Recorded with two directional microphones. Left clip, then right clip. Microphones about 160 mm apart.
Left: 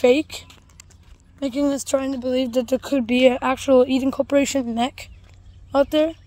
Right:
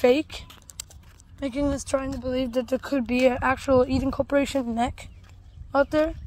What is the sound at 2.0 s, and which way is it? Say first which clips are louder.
Speech: left 5 dB; 40° left (ahead or behind).